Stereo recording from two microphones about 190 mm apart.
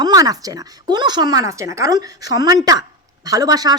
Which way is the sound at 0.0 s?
20° right (ahead or behind).